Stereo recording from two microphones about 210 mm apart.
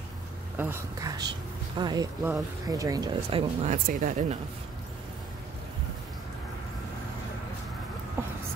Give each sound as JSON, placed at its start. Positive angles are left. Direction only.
{"t": 0.6, "sound": "speech", "side_deg": -10}
{"t": 3.7, "sound": "speech", "side_deg": -40}
{"t": 8.2, "sound": "a sound", "side_deg": -10}